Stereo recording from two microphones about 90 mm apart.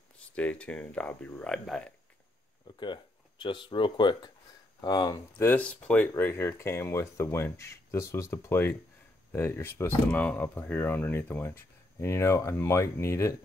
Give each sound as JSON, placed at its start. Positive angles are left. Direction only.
{"t": 0.4, "sound": "speech", "side_deg": 15}
{"t": 2.8, "sound": "speech", "side_deg": 65}
{"t": 4.8, "sound": "speech", "side_deg": 45}
{"t": 5.6, "sound": "speech", "side_deg": 15}
{"t": 6.1, "sound": "speech", "side_deg": 25}